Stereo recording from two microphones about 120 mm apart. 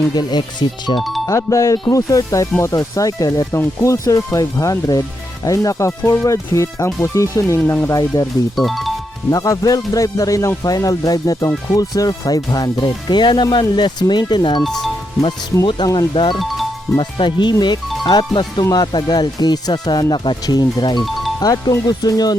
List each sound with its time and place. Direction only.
0.1 s speech: 35° left (ahead or behind)
1.3 s speech: 25° left (ahead or behind)
8.5 s speech: centre (ahead or behind)
9.3 s speech: 30° left (ahead or behind)
14.6 s speech: centre (ahead or behind)
15.8 s speech: 35° left (ahead or behind)